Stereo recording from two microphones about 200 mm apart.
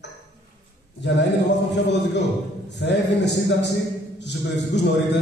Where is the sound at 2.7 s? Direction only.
60° left (ahead or behind).